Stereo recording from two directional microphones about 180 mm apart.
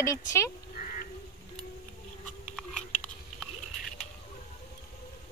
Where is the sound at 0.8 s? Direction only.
45° left (ahead or behind).